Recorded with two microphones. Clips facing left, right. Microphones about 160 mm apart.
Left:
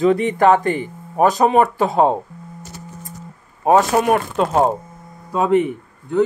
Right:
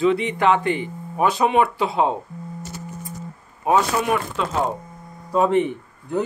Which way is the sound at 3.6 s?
45° left (ahead or behind).